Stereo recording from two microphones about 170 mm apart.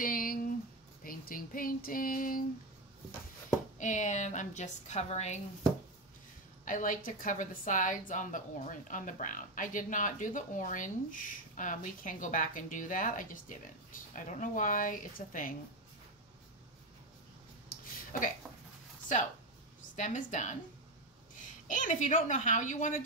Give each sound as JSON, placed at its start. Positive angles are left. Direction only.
{"t": 0.0, "sound": "a sound", "side_deg": 55}
{"t": 1.0, "sound": "child singing", "side_deg": 55}
{"t": 3.7, "sound": "a woman's voice", "side_deg": 45}
{"t": 6.6, "sound": "a woman's voice", "side_deg": 50}
{"t": 17.7, "sound": "a sound", "side_deg": 55}
{"t": 20.0, "sound": "a woman's voice", "side_deg": 50}
{"t": 21.6, "sound": "a woman's voice", "side_deg": 50}